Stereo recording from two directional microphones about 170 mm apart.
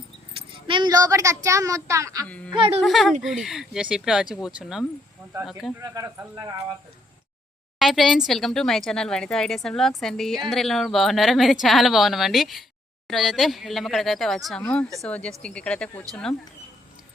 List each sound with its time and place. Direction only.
0.3 s speech: 30° right (ahead or behind)
2.2 s speech: 5° left (ahead or behind)
2.5 s speech: 30° right (ahead or behind)
2.8 s a woman's voice: centre (ahead or behind)
5.7 s speech: 20° right (ahead or behind)
7.8 s a woman's voice: centre (ahead or behind)